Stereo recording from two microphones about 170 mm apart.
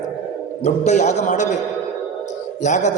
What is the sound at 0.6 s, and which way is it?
Speech, 45° left (ahead or behind).